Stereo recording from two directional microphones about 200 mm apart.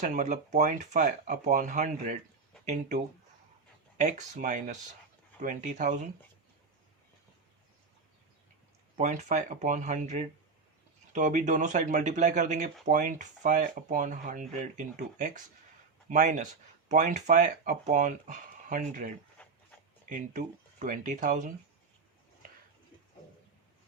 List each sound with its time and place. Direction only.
0.0 s speech: 40° right (ahead or behind)
9.0 s speech: 35° right (ahead or behind)
19.4 s a sound: 5° left (ahead or behind)
20.1 s speech: 40° right (ahead or behind)